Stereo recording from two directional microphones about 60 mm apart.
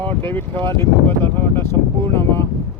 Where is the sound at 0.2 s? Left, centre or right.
Left.